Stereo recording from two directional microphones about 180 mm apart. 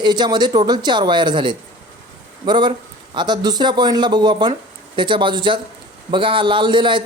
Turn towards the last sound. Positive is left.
turn(degrees=-25)  # may be behind; listen again after turning